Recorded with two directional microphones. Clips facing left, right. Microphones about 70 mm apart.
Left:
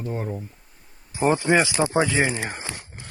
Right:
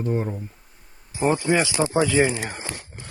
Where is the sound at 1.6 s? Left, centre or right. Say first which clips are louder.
Even; left.